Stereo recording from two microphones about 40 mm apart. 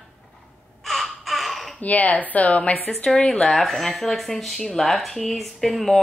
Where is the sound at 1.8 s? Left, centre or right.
Left.